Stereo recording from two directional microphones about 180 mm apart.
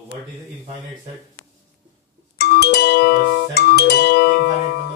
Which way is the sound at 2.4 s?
65° left (ahead or behind).